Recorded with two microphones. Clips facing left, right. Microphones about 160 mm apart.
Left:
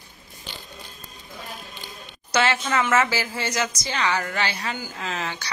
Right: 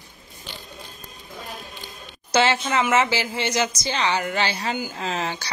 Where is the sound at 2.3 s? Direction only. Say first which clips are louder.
Right 2 dB; 25° right (ahead or behind).